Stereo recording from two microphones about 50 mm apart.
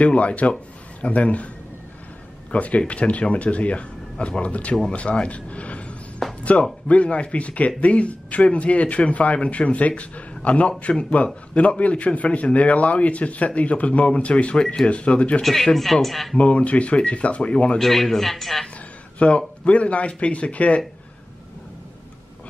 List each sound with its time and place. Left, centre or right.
0.0 s a man's voice: left
2.5 s a man's voice: left
4.8 s a sound: left
6.5 s a man's voice: left
15.4 s speech: centre
16.3 s a man's voice: left
17.7 s speech: centre
19.1 s a man's voice: left